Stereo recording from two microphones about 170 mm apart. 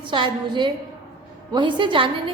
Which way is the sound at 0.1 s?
25° right (ahead or behind).